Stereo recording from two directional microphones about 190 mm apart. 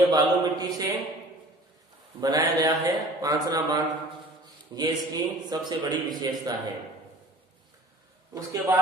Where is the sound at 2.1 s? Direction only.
20° right (ahead or behind).